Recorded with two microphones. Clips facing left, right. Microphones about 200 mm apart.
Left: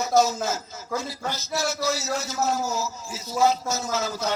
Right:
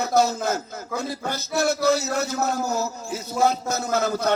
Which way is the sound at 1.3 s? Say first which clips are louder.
Right 5 dB; 55° right (ahead or behind).